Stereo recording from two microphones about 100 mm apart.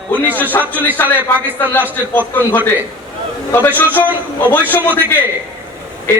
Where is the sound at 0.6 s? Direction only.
30° left (ahead or behind).